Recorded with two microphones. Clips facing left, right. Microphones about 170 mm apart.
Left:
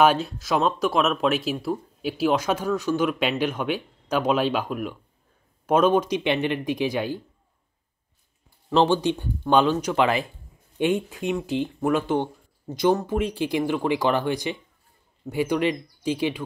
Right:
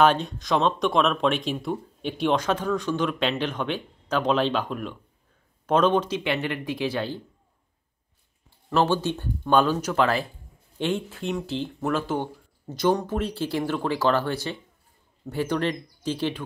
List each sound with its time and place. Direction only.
0.0 s speech: 5° left (ahead or behind)
8.6 s speech: 15° left (ahead or behind)